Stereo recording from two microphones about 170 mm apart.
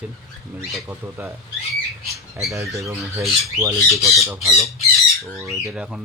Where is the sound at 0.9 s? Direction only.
15° right (ahead or behind).